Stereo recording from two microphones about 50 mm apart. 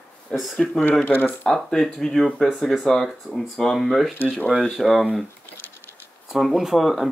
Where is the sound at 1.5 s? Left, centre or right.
Centre.